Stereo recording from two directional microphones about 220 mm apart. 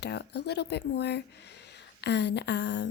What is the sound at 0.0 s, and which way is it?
A woman's voice, 50° left (ahead or behind).